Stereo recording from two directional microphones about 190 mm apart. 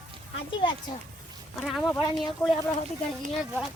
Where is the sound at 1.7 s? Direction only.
Centre (ahead or behind).